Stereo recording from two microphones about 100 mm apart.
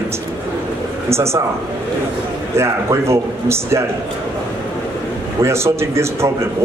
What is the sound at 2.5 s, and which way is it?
Speech, 25° right (ahead or behind).